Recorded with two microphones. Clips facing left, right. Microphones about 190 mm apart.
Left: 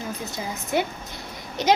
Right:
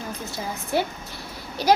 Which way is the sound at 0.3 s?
20° left (ahead or behind).